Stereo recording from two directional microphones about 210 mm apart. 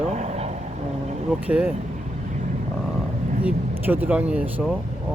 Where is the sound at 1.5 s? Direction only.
5° right (ahead or behind).